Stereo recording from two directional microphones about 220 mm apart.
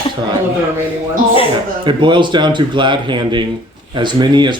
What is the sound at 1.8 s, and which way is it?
Speech, 20° right (ahead or behind).